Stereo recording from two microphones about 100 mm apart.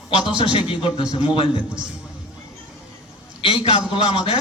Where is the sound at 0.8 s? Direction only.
60° left (ahead or behind).